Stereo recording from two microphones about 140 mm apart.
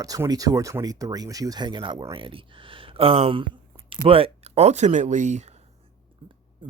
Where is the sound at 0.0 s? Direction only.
25° right (ahead or behind); by 5.5 s 60° right (ahead or behind).